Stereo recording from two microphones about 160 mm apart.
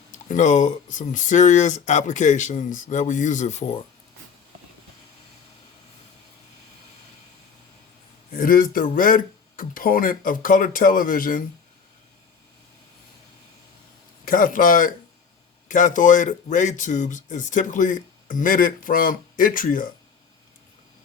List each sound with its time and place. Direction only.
0.1 s speech: 50° left (ahead or behind)
8.3 s speech: 60° left (ahead or behind)
14.3 s speech: 60° left (ahead or behind)